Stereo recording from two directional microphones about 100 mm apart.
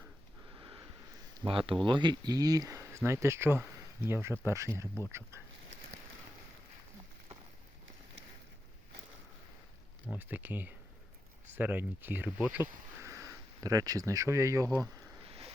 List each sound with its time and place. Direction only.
1.5 s speech: 60° right (ahead or behind); by 5.0 s 25° right (ahead or behind)
10.2 s speech: 20° right (ahead or behind)
13.0 s speech: 30° right (ahead or behind)
15.3 s a sound: 80° right